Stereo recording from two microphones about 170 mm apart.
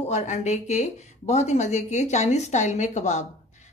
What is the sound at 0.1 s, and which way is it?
A woman's voice, 40° left (ahead or behind).